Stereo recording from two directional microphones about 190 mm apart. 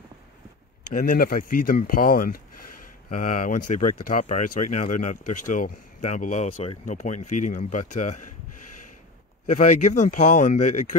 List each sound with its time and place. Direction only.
0.9 s speech: 50° left (ahead or behind)
9.5 s speech: 40° left (ahead or behind)